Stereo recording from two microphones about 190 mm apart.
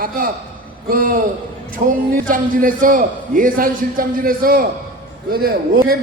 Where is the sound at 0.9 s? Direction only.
50° right (ahead or behind).